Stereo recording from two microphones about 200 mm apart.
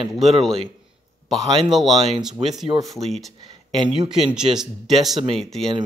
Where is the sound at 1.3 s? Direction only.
20° right (ahead or behind).